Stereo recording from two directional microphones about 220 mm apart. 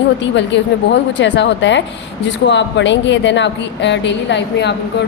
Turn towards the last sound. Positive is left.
turn(degrees=50)  # may be behind; listen again after turning